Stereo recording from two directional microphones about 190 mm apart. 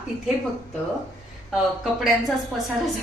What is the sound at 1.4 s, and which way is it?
Speech, centre (ahead or behind).